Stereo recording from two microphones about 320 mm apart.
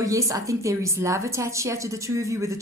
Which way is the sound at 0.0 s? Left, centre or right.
Centre.